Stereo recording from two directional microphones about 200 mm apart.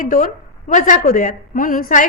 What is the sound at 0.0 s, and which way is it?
A woman's voice, 45° left (ahead or behind).